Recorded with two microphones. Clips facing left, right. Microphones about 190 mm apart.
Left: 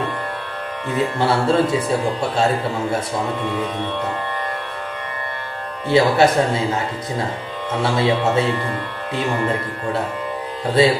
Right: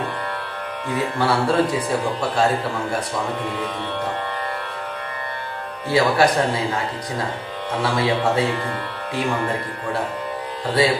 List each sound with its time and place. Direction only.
0.9 s speech: 25° left (ahead or behind)
5.9 s speech: 25° left (ahead or behind)
7.8 s speech: 25° left (ahead or behind)
10.8 s speech: 25° left (ahead or behind)